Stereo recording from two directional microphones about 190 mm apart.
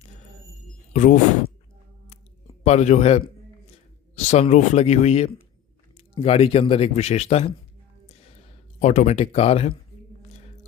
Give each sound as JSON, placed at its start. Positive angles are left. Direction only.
{"t": 0.9, "sound": "speech", "side_deg": 45}
{"t": 2.6, "sound": "speech", "side_deg": 40}
{"t": 8.8, "sound": "speech", "side_deg": 40}